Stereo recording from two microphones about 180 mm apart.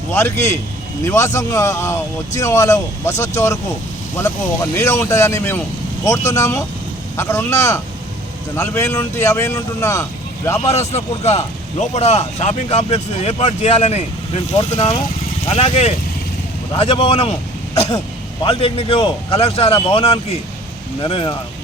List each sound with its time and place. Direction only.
0.1 s speech: 15° left (ahead or behind)
10.7 s a man's voice: 35° left (ahead or behind)
18.4 s a man's voice: 30° left (ahead or behind)